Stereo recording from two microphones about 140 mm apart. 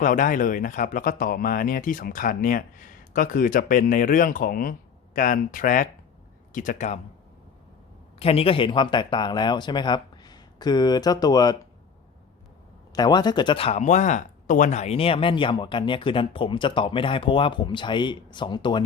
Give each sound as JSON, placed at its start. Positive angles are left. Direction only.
{"t": 0.0, "sound": "speech", "side_deg": 70}
{"t": 5.1, "sound": "speech", "side_deg": 70}
{"t": 8.2, "sound": "speech", "side_deg": 45}
{"t": 12.9, "sound": "speech", "side_deg": 30}
{"t": 13.7, "sound": "speech", "side_deg": 55}